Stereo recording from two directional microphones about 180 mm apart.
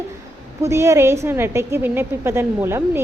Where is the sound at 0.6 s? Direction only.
15° right (ahead or behind).